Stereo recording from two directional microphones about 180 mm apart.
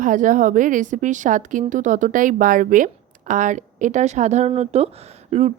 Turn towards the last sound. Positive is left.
turn(degrees=-35)  # may be behind; listen again after turning